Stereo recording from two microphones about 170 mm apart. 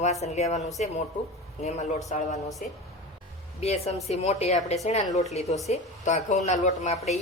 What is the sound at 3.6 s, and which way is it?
A woman's voice, 40° left (ahead or behind).